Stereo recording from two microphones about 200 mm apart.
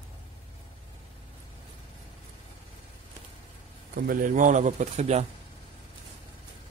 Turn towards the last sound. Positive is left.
turn(degrees=-35)  # may be behind; listen again after turning